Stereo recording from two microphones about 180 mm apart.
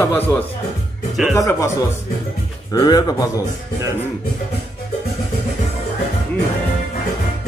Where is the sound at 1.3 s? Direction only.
15° left (ahead or behind).